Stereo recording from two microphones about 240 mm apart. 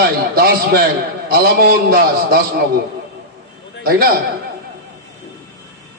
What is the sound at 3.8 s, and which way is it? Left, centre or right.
Speech, right.